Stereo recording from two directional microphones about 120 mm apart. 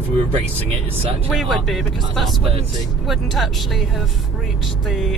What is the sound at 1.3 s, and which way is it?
Speech, centre (ahead or behind).